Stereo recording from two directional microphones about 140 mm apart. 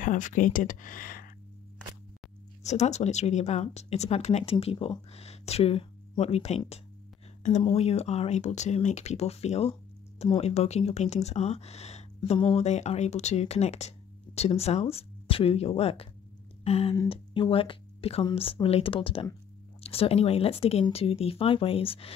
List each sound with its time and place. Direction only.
0.0 s speech: 65° left (ahead or behind); by 1.3 s 90° left
2.6 s speech: 55° left (ahead or behind)
7.7 s speech: 45° left (ahead or behind)
12.3 s speech: 35° left (ahead or behind)
12.5 s speech: 55° left (ahead or behind)
16.6 s a sound: 45° left (ahead or behind)
17.1 s speech: 40° left (ahead or behind)